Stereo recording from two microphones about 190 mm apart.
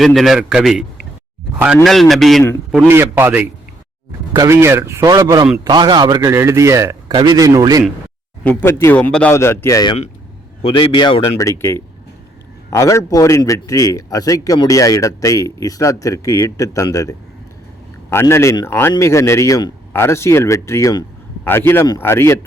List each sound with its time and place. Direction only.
0.0 s a man's voice: centre (ahead or behind)
2.7 s a man's voice: 10° right (ahead or behind)
8.4 s a man's voice: 10° left (ahead or behind)